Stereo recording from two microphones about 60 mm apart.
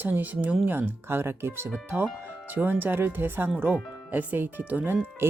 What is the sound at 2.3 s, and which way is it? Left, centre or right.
Speech, right.